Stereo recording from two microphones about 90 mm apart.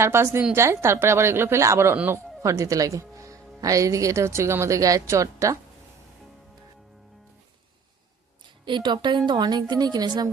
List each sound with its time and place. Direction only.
0.0 s a woman's voice: 25° right (ahead or behind)
8.6 s a woman's voice: 60° right (ahead or behind)